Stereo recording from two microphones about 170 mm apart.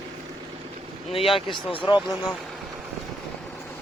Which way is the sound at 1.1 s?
35° left (ahead or behind).